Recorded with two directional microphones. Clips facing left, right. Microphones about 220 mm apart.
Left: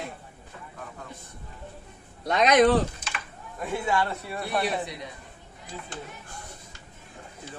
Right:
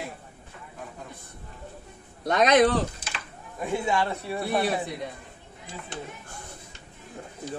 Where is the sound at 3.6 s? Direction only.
15° right (ahead or behind).